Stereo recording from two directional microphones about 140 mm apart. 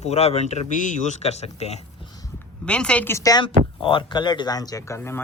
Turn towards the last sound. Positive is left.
turn(degrees=15)  # may be behind; listen again after turning